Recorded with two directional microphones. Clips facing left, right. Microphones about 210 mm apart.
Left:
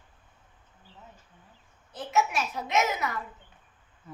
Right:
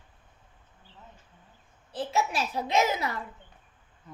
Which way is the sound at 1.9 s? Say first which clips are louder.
Left 1 dB; 30° right (ahead or behind).